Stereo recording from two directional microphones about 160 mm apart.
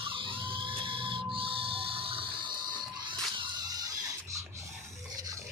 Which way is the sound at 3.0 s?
30° right (ahead or behind).